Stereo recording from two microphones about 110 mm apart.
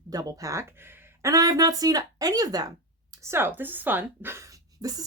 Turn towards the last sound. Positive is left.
turn(degrees=-30)  # may be behind; listen again after turning